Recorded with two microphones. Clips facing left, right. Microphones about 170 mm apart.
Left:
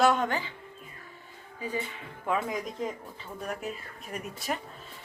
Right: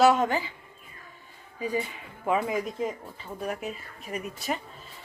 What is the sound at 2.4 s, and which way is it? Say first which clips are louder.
Speech: right 4 dB; 5° right (ahead or behind).